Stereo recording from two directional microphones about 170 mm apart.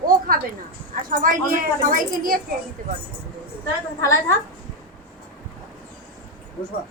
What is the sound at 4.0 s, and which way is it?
Speech, 20° left (ahead or behind).